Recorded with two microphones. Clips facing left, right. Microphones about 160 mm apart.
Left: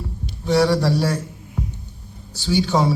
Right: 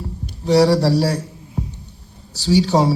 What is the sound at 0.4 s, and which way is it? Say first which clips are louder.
A man's voice: right 3 dB; 35° right (ahead or behind).